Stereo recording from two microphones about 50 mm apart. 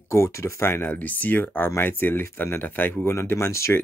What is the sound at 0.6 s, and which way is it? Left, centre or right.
Speech, left.